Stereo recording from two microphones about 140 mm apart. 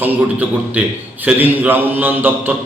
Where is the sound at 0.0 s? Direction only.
10° right (ahead or behind).